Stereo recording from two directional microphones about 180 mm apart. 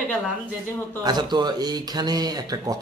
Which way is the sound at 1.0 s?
25° right (ahead or behind).